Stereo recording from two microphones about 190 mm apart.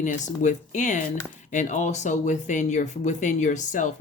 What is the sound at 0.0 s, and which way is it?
Speech, 40° left (ahead or behind).